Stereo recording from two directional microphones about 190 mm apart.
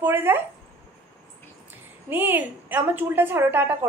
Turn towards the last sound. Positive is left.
turn(degrees=-10)  # may be behind; listen again after turning